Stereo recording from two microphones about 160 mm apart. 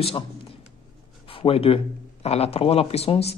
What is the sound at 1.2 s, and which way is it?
A man's voice, 35° left (ahead or behind).